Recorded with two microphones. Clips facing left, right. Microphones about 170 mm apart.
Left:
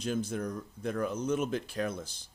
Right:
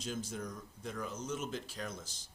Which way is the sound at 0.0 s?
60° left (ahead or behind).